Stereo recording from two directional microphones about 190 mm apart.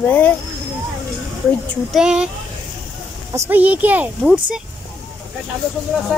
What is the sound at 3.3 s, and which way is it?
A woman's voice, 10° right (ahead or behind).